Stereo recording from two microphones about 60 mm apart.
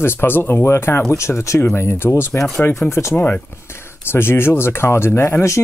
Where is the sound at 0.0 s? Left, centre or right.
Left.